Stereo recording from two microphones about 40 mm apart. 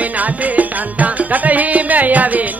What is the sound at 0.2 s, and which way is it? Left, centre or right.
Music, right.